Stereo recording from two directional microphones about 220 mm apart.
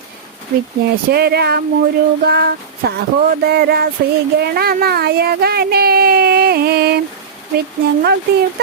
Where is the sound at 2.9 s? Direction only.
45° right (ahead or behind).